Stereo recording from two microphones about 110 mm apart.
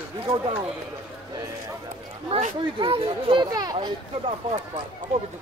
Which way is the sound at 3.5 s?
35° right (ahead or behind).